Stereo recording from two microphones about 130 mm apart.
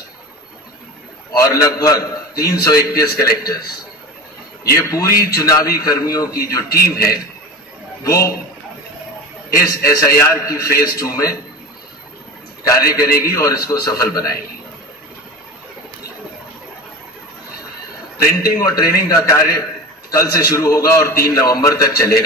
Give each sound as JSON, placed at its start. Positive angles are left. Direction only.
{"t": 1.4, "sound": "a man's voice", "side_deg": 25}
{"t": 4.6, "sound": "a man's voice", "side_deg": 25}
{"t": 9.7, "sound": "a man's voice", "side_deg": 25}
{"t": 12.7, "sound": "a man's voice", "side_deg": 25}
{"t": 18.6, "sound": "a man's voice", "side_deg": 30}